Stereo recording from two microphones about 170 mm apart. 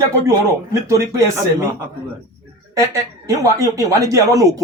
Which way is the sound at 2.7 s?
20° right (ahead or behind).